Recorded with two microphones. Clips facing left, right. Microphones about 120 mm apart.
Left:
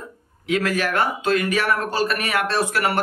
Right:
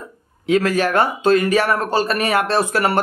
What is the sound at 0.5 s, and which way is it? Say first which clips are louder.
Speech: right 5 dB; 30° right (ahead or behind).